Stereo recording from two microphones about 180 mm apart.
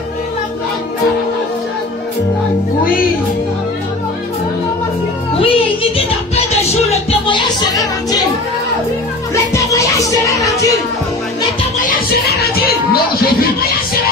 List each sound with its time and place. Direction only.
5.4 s music: 30° left (ahead or behind)
9.3 s music: 15° left (ahead or behind)
11.8 s music: 60° left (ahead or behind)